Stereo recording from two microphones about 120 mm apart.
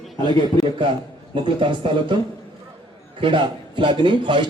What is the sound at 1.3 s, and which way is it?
Speech, 45° right (ahead or behind).